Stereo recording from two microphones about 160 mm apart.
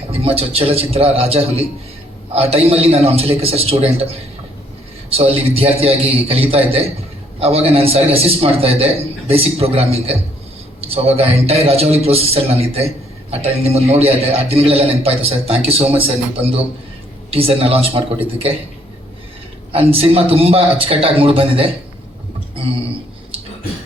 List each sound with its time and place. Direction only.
0.1 s a man's voice: 35° right (ahead or behind)
5.1 s a man's voice: 40° right (ahead or behind)
19.7 s a man's voice: 35° right (ahead or behind)